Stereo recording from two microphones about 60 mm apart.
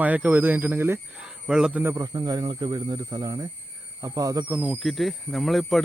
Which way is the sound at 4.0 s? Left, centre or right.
Right.